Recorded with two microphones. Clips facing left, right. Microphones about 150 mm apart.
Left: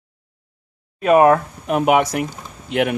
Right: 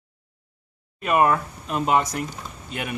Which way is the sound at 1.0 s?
80° left.